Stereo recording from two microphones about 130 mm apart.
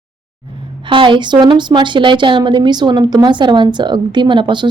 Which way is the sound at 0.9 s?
40° right (ahead or behind).